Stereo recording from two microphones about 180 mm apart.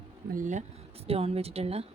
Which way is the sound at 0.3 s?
45° right (ahead or behind).